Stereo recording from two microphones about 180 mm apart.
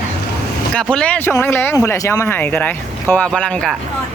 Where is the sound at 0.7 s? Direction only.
5° left (ahead or behind).